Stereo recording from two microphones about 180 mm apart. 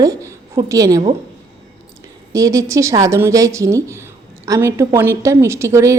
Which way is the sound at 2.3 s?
15° right (ahead or behind).